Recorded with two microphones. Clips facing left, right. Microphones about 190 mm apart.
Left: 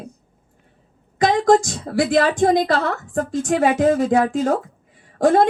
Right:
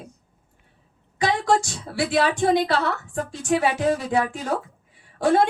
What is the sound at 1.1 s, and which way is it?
A woman's voice, 45° left (ahead or behind).